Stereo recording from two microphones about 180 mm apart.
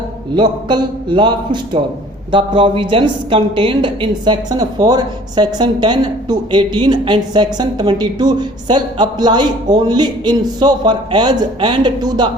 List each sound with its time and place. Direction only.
0.3 s a woman's voice: 25° right (ahead or behind)